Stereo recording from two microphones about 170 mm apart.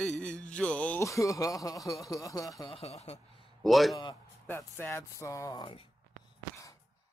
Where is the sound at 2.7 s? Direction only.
40° left (ahead or behind).